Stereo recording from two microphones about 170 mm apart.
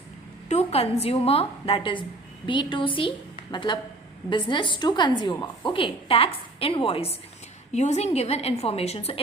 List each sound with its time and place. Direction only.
0.4 s a woman's voice: 35° left (ahead or behind)